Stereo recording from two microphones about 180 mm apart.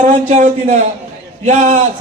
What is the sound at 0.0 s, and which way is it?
A man's voice, 45° right (ahead or behind).